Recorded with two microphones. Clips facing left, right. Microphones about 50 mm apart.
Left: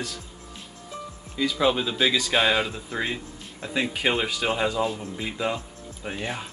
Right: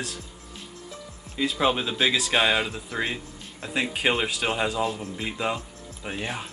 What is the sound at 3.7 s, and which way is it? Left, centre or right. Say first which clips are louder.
Speech: even; centre.